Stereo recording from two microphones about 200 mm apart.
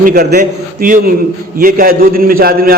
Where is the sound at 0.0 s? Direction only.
45° right (ahead or behind).